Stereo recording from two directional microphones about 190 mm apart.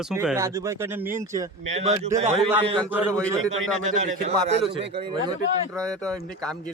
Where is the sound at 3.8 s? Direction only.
35° right (ahead or behind).